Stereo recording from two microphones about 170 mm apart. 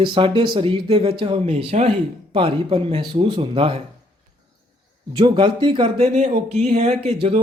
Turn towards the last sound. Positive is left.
turn(degrees=-35)  # may be behind; listen again after turning